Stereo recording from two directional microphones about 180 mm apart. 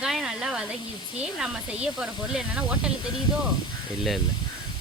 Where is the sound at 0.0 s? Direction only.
5° right (ahead or behind).